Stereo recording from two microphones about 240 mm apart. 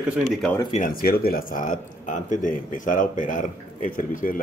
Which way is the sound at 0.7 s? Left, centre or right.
Left.